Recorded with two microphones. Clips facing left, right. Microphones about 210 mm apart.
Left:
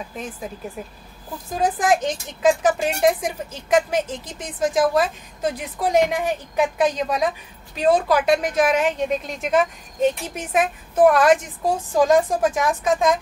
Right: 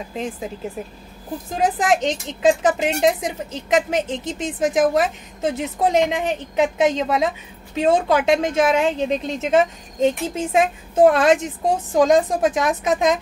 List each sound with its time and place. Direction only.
1.5 s a woman's voice: 20° right (ahead or behind)